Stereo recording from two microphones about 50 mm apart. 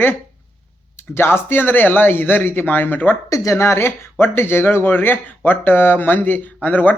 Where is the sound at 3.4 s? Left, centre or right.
Left.